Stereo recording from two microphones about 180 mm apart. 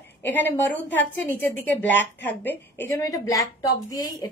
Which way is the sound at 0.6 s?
10° left (ahead or behind).